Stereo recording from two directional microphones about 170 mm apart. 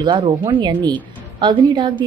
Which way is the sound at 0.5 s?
25° right (ahead or behind).